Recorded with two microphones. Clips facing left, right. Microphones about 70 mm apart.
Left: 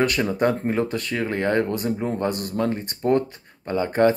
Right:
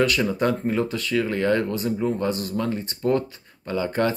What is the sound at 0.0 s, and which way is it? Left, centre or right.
Speech, left.